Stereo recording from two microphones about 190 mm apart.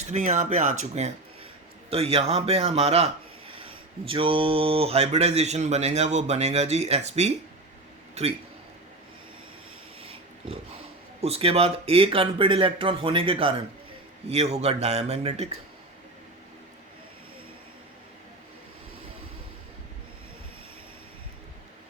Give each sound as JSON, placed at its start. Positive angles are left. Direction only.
{"t": 0.1, "sound": "a man's voice", "side_deg": -40}
{"t": 10.0, "sound": "a sound", "side_deg": -30}
{"t": 11.2, "sound": "a man's voice", "side_deg": -30}